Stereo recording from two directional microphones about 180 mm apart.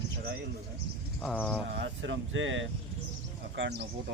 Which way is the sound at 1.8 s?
90° right.